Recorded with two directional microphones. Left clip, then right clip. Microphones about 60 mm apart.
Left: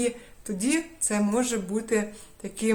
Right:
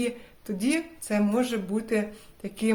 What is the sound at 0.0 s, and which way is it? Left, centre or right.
Speech, left.